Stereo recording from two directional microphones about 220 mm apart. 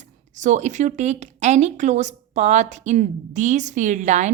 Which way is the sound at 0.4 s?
35° right (ahead or behind).